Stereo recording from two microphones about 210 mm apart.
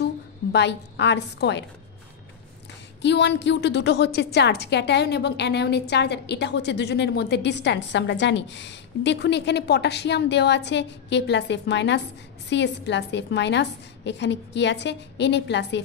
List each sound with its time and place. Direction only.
0.0 s a woman's voice: 55° left (ahead or behind)
3.0 s a woman's voice: 55° left (ahead or behind)